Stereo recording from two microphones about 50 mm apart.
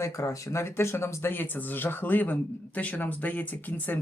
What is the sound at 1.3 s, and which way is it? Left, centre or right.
Speech, left.